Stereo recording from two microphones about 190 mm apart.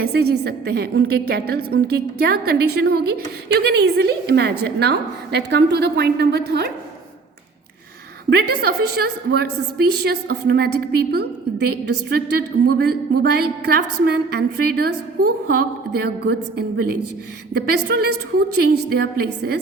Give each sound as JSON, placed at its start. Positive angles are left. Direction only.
{"t": 0.0, "sound": "a woman's voice", "side_deg": -55}
{"t": 8.3, "sound": "a woman's voice", "side_deg": -60}